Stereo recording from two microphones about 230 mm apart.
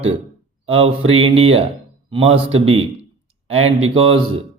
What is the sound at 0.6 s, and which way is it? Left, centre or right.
Speech, right.